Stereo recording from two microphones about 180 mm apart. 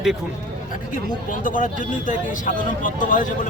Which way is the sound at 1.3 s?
45° left (ahead or behind).